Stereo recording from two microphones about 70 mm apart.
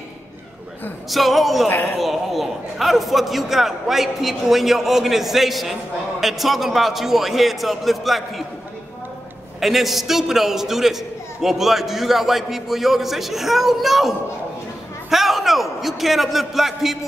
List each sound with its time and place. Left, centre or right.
1.1 s a man's voice: centre
1.7 s speech: left
2.0 s a man's voice: centre
9.6 s a man's voice: centre